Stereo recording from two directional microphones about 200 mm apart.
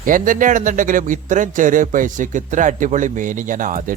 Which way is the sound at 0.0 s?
40° right (ahead or behind).